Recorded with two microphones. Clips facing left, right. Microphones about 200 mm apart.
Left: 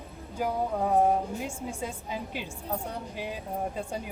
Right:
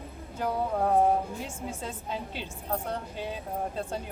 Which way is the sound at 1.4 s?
15° left (ahead or behind).